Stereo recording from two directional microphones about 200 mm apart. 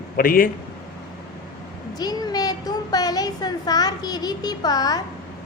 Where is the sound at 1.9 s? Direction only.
20° left (ahead or behind).